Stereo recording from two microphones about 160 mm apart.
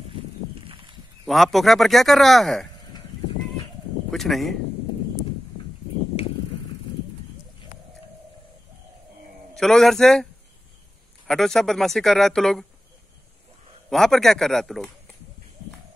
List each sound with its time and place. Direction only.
0.7 s a sound: 35° right (ahead or behind)
1.2 s speech: centre (ahead or behind)
4.1 s speech: centre (ahead or behind)
6.2 s a sound: 35° left (ahead or behind)
9.6 s speech: centre (ahead or behind)
11.2 s speech: centre (ahead or behind)
13.8 s speech: centre (ahead or behind)